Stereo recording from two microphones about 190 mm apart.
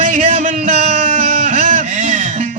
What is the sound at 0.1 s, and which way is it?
Music, 40° right (ahead or behind).